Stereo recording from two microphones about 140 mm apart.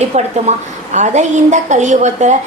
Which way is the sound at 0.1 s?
50° right (ahead or behind).